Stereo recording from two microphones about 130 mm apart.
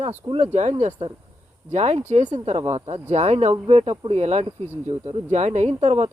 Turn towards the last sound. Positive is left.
turn(degrees=-60)  # may be behind; listen again after turning